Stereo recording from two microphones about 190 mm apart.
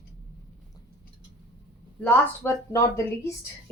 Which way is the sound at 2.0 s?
10° left (ahead or behind).